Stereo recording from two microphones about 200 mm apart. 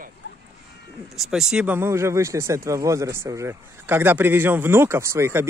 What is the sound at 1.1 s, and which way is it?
Speech, centre (ahead or behind).